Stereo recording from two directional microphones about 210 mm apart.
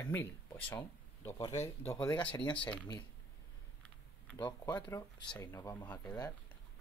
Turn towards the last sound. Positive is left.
turn(degrees=5)  # may be behind; listen again after turning